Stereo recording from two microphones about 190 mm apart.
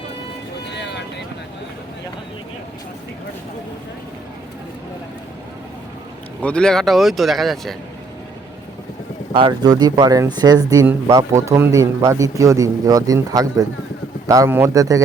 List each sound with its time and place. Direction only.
0.7 s vehicle: 65° left (ahead or behind)
6.4 s speech: 5° left (ahead or behind)
9.3 s speech: 25° right (ahead or behind)